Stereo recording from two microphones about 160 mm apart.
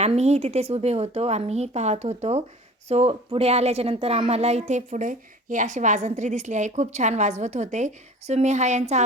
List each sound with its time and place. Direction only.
0.0 s speech: 45° right (ahead or behind)